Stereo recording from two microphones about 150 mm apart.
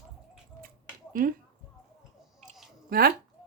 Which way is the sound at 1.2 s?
65° right (ahead or behind).